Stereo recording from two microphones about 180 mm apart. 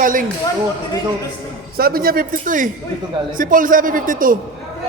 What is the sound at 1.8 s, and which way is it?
A man's voice, 55° right (ahead or behind).